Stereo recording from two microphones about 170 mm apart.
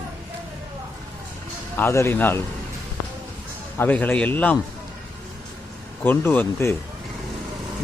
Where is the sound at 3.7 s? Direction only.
10° left (ahead or behind).